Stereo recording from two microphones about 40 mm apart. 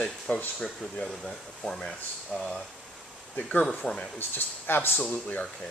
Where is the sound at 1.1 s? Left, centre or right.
Centre.